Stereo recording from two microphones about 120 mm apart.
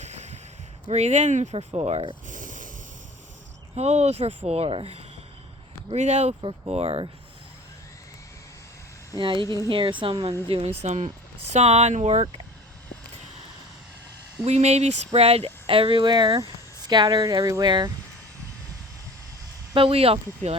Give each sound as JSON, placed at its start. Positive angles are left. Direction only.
{"t": 0.0, "sound": "a sound", "side_deg": -70}
{"t": 0.9, "sound": "speech", "side_deg": -65}
{"t": 1.5, "sound": "speech", "side_deg": -55}
{"t": 2.2, "sound": "a sound", "side_deg": -90}
{"t": 3.8, "sound": "speech", "side_deg": -65}
{"t": 5.9, "sound": "speech", "side_deg": -70}
{"t": 6.4, "sound": "speech", "side_deg": -55}
{"t": 9.1, "sound": "speech", "side_deg": -45}
{"t": 10.5, "sound": "speech", "side_deg": -55}
{"t": 14.4, "sound": "speech", "side_deg": -65}
{"t": 19.7, "sound": "speech", "side_deg": -50}